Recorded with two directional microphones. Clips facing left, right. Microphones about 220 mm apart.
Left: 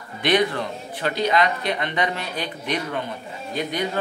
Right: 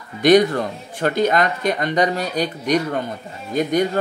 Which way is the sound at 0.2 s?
45° right (ahead or behind).